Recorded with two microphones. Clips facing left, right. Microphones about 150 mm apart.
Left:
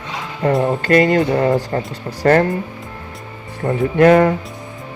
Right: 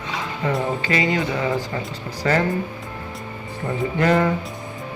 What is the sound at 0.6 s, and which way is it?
Speech, 55° left (ahead or behind).